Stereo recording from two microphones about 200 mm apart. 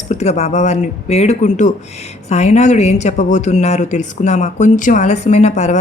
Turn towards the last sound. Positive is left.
turn(degrees=35)  # may be behind; listen again after turning